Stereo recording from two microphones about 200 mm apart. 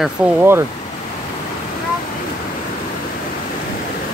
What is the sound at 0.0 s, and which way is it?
Speech, 10° right (ahead or behind).